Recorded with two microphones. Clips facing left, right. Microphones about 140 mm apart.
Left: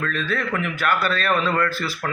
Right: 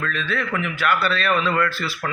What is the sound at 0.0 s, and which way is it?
A man's voice, 40° left (ahead or behind).